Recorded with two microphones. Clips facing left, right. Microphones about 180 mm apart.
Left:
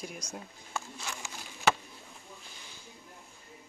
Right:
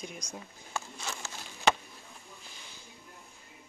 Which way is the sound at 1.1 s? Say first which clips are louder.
Right 1 dB; 10° left (ahead or behind).